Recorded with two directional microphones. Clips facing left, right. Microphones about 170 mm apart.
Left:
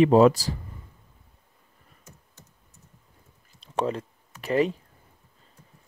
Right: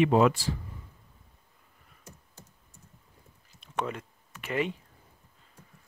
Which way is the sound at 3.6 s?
35° left (ahead or behind).